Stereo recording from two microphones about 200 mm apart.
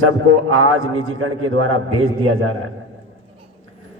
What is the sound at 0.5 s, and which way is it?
A man's voice, 90° right.